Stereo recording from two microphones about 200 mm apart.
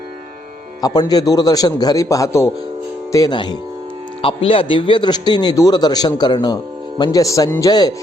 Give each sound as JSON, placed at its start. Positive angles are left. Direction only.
{"t": 0.8, "sound": "a man's voice", "side_deg": 20}